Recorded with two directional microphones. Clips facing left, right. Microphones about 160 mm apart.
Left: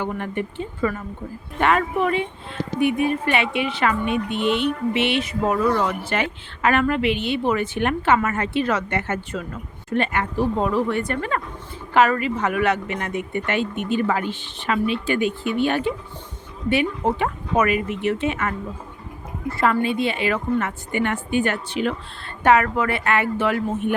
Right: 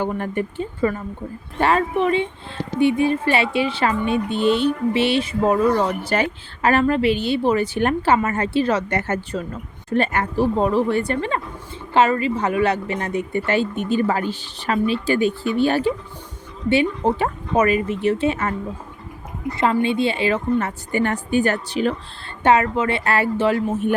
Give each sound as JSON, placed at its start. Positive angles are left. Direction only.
{"t": 0.0, "sound": "a woman's voice", "side_deg": -40}
{"t": 19.5, "sound": "a woman's voice", "side_deg": -20}
{"t": 22.4, "sound": "a woman's voice", "side_deg": -25}